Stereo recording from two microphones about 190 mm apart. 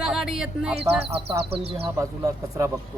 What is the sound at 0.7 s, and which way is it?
Speech, 30° right (ahead or behind).